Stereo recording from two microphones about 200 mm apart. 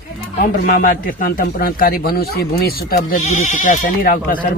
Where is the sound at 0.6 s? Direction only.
45° left (ahead or behind).